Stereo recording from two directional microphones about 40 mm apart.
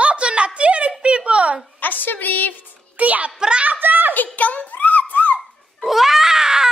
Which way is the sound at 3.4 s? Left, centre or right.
Right.